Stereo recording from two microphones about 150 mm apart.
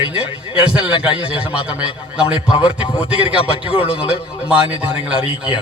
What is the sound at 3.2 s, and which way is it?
A man's voice, 35° left (ahead or behind).